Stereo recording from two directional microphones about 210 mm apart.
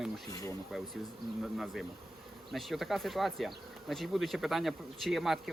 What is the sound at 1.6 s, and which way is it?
Speech, centre (ahead or behind).